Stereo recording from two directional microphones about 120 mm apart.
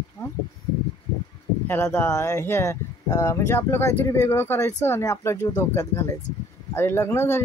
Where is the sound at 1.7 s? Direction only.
20° left (ahead or behind).